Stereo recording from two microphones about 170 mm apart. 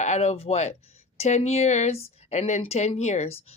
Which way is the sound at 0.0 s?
40° left (ahead or behind).